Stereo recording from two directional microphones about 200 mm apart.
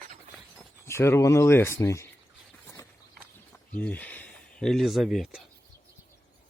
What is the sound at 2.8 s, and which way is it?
Horse, 15° left (ahead or behind).